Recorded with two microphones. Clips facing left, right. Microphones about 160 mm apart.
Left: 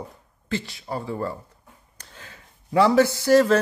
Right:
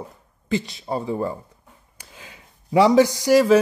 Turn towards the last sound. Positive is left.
turn(degrees=-10)  # may be behind; listen again after turning